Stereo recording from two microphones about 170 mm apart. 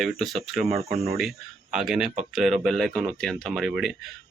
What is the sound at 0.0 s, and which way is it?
Speech, centre (ahead or behind).